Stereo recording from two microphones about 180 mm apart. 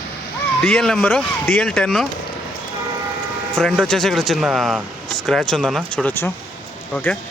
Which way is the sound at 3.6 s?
5° left (ahead or behind).